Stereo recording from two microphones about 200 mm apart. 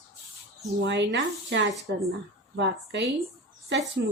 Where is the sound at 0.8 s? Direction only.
60° right (ahead or behind).